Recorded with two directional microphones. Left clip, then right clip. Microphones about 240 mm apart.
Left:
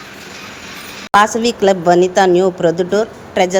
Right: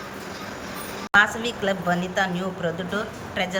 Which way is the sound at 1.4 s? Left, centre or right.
Left.